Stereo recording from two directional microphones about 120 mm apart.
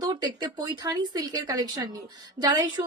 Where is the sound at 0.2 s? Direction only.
35° right (ahead or behind).